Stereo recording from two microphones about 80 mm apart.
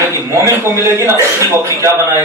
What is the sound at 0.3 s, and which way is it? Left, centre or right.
A man's voice, right.